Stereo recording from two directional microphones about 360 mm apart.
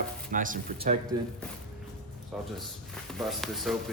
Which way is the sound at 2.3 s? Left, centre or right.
Centre.